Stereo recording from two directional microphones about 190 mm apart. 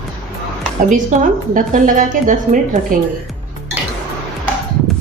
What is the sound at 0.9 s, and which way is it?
A woman's voice, 40° right (ahead or behind).